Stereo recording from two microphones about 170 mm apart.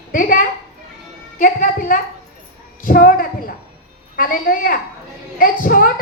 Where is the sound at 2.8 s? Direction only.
55° left (ahead or behind).